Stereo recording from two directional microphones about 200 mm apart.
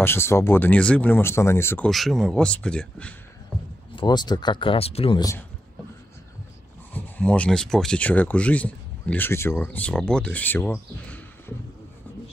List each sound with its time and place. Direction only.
0.0 s speech: 10° left (ahead or behind)
1.9 s speech: centre (ahead or behind)
3.9 s speech: 20° left (ahead or behind)
6.9 s speech: 10° left (ahead or behind)